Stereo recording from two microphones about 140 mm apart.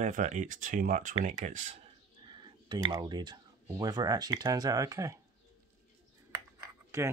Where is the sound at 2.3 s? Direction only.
35° right (ahead or behind).